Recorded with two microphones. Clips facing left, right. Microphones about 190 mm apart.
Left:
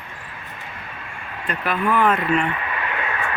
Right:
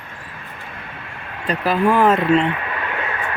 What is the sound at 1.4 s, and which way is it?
Speech, 35° right (ahead or behind).